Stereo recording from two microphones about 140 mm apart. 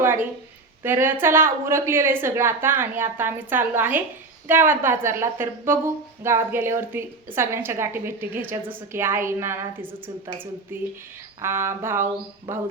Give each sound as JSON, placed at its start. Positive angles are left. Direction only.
{"t": 0.8, "sound": "a woman's voice", "side_deg": -15}